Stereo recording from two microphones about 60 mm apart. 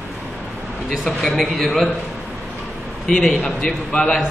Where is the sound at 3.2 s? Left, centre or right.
Centre.